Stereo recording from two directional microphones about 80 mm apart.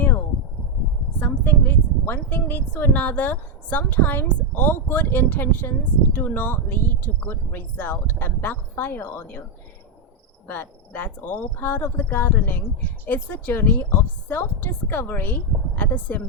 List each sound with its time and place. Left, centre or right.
1.2 s a woman's voice: left
10.4 s a woman's voice: left